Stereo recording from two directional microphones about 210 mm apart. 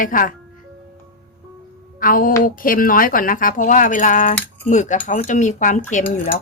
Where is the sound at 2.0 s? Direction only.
40° left (ahead or behind).